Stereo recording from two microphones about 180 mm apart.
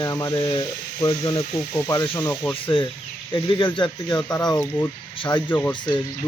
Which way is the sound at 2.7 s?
30° left (ahead or behind).